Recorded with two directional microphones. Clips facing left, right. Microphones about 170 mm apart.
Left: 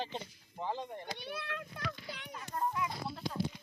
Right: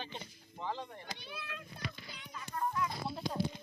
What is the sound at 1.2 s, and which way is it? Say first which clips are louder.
A child's voice: left 5 dB; 65° left (ahead or behind).